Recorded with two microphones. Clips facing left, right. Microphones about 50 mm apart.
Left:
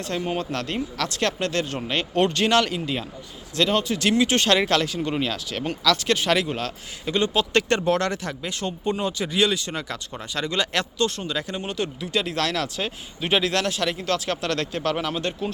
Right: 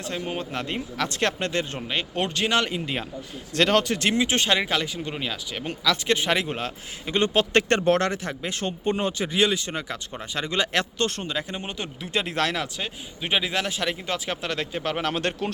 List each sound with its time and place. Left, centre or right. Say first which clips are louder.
0.3 s speech: left 3 dB; centre
1.0 s a man's voice: even; right
1.9 s speech: left 8 dB; centre
3.8 s speech: left 2 dB; right
4.2 s a man's voice: left 5 dB; centre
7.2 s a man's voice: right 1 dB; right
9.2 s a man's voice: left 1 dB; right
10.9 s speech: left 2 dB; right
11.3 s a man's voice: left 2 dB; centre
12.6 s speech: left 4 dB; centre
15.0 s speech: right 1 dB; right